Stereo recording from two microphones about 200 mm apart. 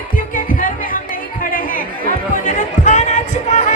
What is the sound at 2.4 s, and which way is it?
Music, 40° left (ahead or behind).